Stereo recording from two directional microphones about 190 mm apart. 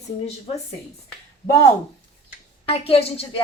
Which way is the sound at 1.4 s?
20° left (ahead or behind).